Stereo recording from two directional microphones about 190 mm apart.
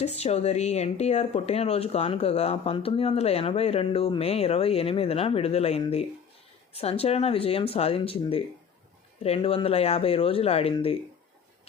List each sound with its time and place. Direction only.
0.0 s speech: 35° left (ahead or behind)